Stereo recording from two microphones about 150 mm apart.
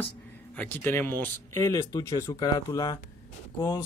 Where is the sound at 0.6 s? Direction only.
10° left (ahead or behind).